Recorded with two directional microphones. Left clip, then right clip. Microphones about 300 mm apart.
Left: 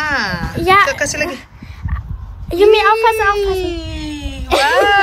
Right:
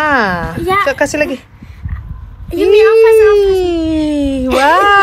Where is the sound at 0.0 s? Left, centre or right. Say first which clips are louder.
Right 6 dB; centre.